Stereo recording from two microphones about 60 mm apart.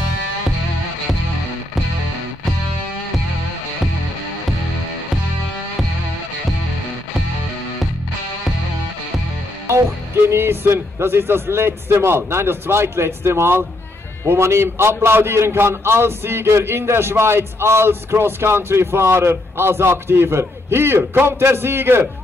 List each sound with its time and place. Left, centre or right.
10.3 s a man's voice: right